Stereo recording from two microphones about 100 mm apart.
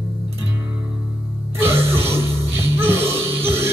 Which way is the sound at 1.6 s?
25° right (ahead or behind).